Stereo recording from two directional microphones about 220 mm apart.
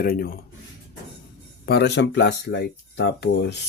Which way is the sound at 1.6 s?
50° left (ahead or behind).